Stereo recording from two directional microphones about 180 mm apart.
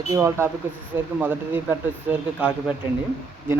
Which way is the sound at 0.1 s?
15° right (ahead or behind).